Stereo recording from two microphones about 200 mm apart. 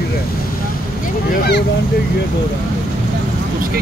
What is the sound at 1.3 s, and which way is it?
Speech, 55° left (ahead or behind).